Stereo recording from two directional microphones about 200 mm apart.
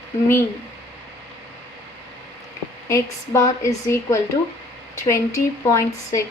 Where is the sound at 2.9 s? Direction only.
15° left (ahead or behind).